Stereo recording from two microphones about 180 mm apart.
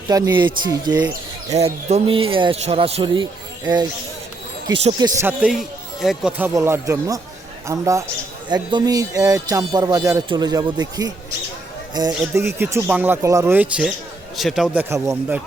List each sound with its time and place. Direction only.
0.1 s a man's voice: 20° right (ahead or behind)
1.5 s speech: 35° right (ahead or behind)
4.8 s a man's voice: 25° right (ahead or behind)
5.2 s a man's voice: 5° right (ahead or behind)